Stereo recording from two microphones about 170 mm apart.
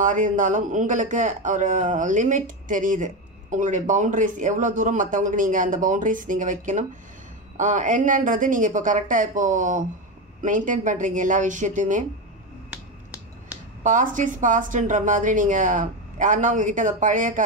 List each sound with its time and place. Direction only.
0.0 s speech: 50° right (ahead or behind)
12.7 s finger snapping: 10° right (ahead or behind)
13.8 s speech: 50° right (ahead or behind)